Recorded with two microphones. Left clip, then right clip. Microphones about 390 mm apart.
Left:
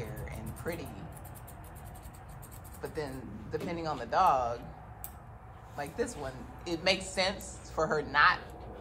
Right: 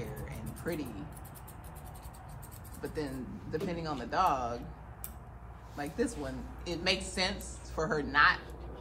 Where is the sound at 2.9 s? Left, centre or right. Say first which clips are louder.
Even; centre.